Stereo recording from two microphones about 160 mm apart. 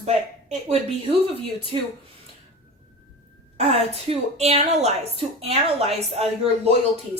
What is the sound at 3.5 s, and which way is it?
A woman's voice, 40° right (ahead or behind).